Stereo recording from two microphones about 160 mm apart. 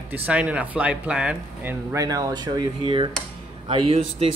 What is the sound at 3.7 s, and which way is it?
Speech, 35° right (ahead or behind).